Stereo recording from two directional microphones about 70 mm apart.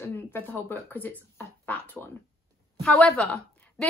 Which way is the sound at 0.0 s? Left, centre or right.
Left.